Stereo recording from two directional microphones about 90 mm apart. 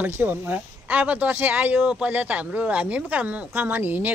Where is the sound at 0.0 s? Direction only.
20° right (ahead or behind).